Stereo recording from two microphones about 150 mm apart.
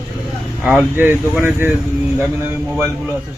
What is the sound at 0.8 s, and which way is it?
A man's voice, 15° right (ahead or behind).